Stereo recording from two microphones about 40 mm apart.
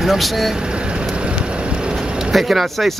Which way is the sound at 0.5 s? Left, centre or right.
Right.